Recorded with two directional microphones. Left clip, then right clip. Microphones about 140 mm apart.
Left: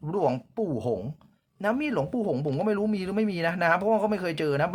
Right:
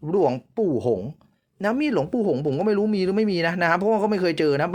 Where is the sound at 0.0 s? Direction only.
25° right (ahead or behind).